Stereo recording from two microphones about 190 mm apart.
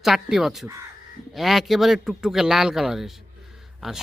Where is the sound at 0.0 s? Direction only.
Centre (ahead or behind).